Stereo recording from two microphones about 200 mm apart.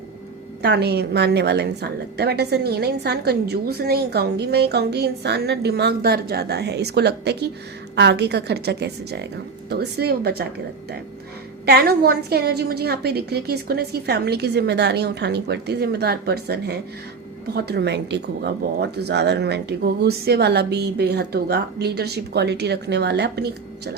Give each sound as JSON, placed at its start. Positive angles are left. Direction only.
{"t": 0.6, "sound": "a woman's voice", "side_deg": -55}
{"t": 11.6, "sound": "a woman's voice", "side_deg": -50}